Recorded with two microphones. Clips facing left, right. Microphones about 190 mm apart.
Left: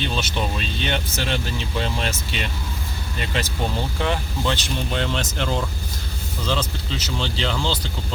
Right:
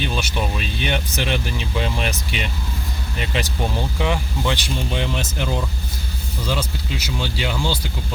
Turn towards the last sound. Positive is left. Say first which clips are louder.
# right 1 dB
turn(degrees=-10)  # may be behind; listen again after turning